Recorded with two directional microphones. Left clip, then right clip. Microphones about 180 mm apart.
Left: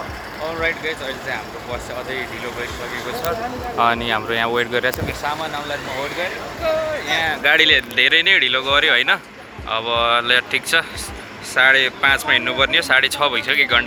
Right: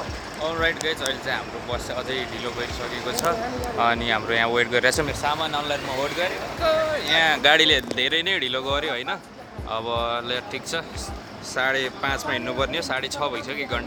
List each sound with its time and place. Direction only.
0.6 s speech: 10° right (ahead or behind)
3.8 s speech: 10° left (ahead or behind); by 6.8 s 15° right (ahead or behind)
7.2 s speech: 35° right (ahead or behind)
7.9 s speech: 15° right (ahead or behind)
8.8 s speech: centre (ahead or behind)
9.6 s speech: 15° right (ahead or behind)